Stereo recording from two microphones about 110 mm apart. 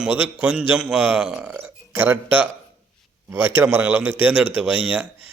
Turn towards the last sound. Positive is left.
turn(degrees=-15)  # may be behind; listen again after turning